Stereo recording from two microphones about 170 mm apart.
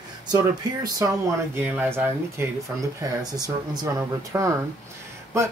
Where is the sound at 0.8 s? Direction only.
20° right (ahead or behind).